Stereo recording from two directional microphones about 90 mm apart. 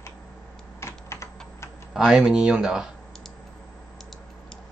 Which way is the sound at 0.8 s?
30° left (ahead or behind).